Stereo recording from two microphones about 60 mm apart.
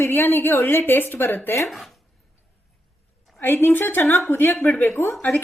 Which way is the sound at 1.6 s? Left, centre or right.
Centre.